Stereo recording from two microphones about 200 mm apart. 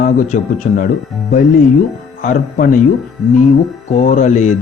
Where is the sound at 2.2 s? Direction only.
40° left (ahead or behind).